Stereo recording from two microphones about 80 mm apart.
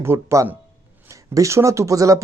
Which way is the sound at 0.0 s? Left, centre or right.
Right.